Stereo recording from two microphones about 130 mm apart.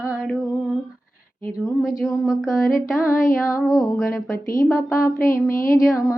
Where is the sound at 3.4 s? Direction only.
25° left (ahead or behind).